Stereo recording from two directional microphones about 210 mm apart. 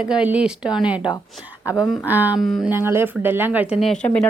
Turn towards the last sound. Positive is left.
turn(degrees=0)  # may be behind; listen again after turning